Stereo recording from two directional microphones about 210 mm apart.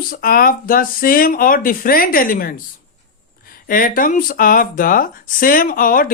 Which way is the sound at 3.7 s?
40° left (ahead or behind).